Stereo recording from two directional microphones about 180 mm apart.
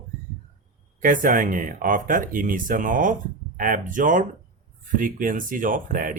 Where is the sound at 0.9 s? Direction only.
50° right (ahead or behind).